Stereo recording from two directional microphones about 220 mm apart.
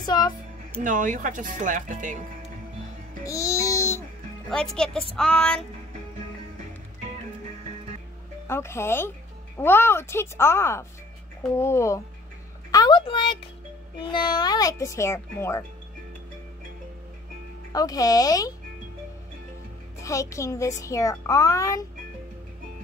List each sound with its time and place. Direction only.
0.0 s speech: 20° left (ahead or behind)
0.8 s speech: 35° right (ahead or behind)
3.3 s music: 15° left (ahead or behind)
4.5 s speech: 5° left (ahead or behind)
8.5 s a child's voice: 10° left (ahead or behind)
17.7 s a child's voice: 15° left (ahead or behind)
20.0 s a child's voice: 15° left (ahead or behind)